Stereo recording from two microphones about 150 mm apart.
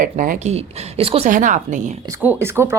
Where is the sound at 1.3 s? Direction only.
60° right (ahead or behind).